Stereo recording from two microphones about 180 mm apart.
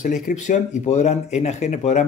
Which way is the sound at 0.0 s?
45° left (ahead or behind).